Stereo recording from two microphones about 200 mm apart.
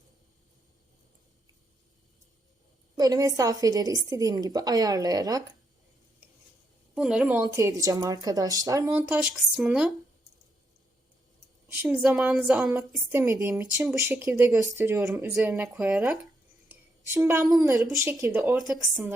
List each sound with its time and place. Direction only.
3.0 s a woman's voice: 20° right (ahead or behind)
6.2 s stir: 10° right (ahead or behind)
6.9 s a woman's voice: centre (ahead or behind)
11.7 s a woman's voice: 10° right (ahead or behind)
15.0 s speech: centre (ahead or behind)
17.2 s a woman's voice: 15° right (ahead or behind)